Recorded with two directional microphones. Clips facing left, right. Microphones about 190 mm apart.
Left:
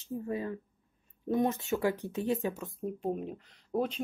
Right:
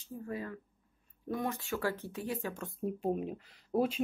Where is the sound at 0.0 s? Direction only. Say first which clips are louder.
Left 5 dB; 20° left (ahead or behind).